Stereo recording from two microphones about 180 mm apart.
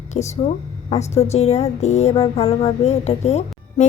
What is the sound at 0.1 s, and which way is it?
A woman's voice, 40° left (ahead or behind).